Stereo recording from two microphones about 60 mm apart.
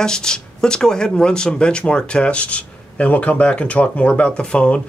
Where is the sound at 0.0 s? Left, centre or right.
Centre.